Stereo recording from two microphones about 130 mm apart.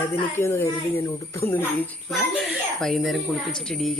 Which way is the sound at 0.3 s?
20° left (ahead or behind).